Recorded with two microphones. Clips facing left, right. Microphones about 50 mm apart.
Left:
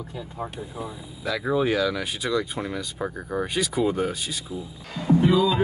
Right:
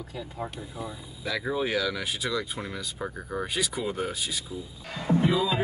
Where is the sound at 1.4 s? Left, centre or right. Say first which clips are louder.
Left 6 dB; centre.